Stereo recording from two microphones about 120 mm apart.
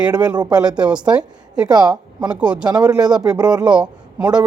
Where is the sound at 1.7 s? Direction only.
35° right (ahead or behind).